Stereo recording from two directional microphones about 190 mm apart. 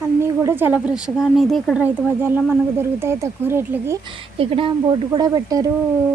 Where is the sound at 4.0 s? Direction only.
25° right (ahead or behind).